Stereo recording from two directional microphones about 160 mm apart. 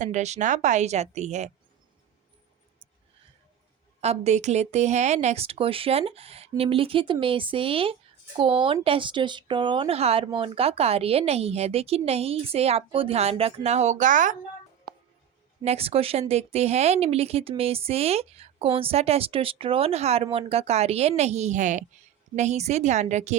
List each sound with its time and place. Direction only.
0.0 s a woman's voice: 45° right (ahead or behind)
4.0 s a woman's voice: 40° right (ahead or behind)
15.6 s a woman's voice: 40° right (ahead or behind)